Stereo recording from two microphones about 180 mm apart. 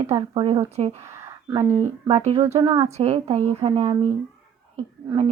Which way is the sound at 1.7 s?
40° right (ahead or behind).